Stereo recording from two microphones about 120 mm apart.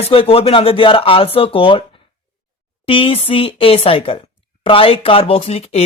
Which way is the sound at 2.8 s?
50° left (ahead or behind).